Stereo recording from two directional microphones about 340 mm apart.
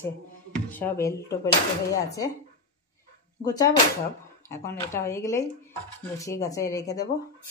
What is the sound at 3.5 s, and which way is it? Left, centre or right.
Speech, centre.